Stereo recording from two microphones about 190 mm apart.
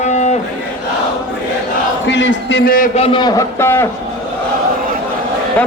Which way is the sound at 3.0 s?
25° left (ahead or behind).